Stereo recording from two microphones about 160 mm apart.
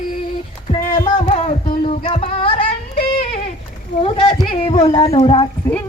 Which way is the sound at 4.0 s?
35° left (ahead or behind).